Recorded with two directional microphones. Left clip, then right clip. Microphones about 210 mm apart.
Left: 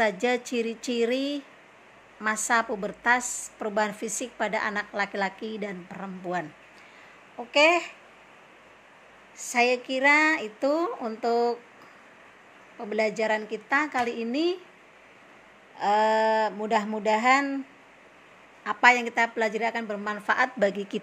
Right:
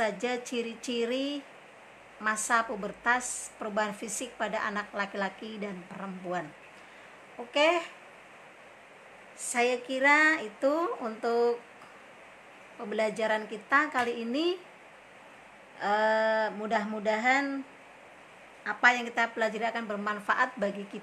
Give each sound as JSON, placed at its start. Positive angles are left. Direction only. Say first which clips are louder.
{"t": 0.0, "sound": "a woman's voice", "louder": "left 6 dB", "side_deg": 20}
{"t": 7.5, "sound": "a woman's voice", "louder": "left 5 dB", "side_deg": 20}
{"t": 9.4, "sound": "a woman's voice", "louder": "left 4 dB", "side_deg": 15}
{"t": 12.7, "sound": "a woman's voice", "louder": "left 4 dB", "side_deg": 10}
{"t": 15.8, "sound": "a woman's voice", "louder": "left 4 dB", "side_deg": 15}
{"t": 18.6, "sound": "a woman's voice", "louder": "left 5 dB", "side_deg": 20}